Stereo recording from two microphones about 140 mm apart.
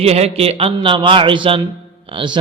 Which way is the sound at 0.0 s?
50° right (ahead or behind).